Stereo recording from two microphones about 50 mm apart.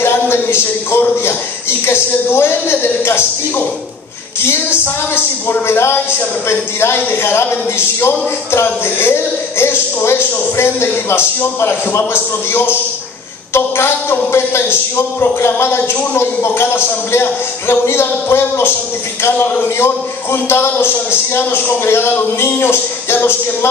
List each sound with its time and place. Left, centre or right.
0.0 s a man's voice: left
4.5 s a man's voice: left
8.6 s a man's voice: left